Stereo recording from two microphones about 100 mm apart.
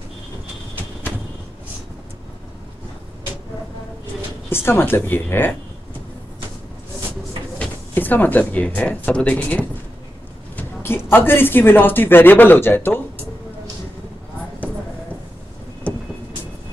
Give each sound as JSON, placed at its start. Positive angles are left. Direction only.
{"t": 4.5, "sound": "a man's voice", "side_deg": 25}
{"t": 7.5, "sound": "a man's voice", "side_deg": 15}